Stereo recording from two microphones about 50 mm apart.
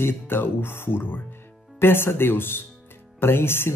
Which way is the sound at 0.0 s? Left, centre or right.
Left.